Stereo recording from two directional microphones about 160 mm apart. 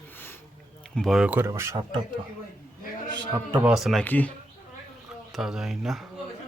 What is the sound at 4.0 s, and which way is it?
Speech, 10° left (ahead or behind).